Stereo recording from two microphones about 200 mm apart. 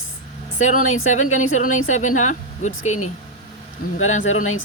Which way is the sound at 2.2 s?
35° left (ahead or behind).